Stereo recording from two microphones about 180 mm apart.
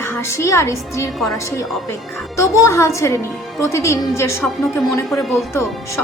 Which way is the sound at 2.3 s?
15° left (ahead or behind).